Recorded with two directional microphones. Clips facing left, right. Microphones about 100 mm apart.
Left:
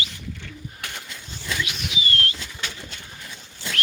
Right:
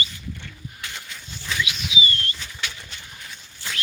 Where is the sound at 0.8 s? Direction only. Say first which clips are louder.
Right 1 dB; 60° left (ahead or behind); by 2.4 s 90° left.